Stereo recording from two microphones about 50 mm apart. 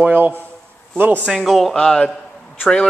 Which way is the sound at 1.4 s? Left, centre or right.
Centre.